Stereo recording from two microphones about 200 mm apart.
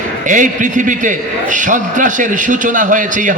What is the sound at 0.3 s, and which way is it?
A man's voice, 40° right (ahead or behind).